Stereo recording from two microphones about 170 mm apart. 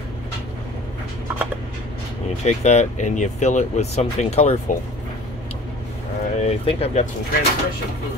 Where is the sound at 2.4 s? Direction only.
40° left (ahead or behind).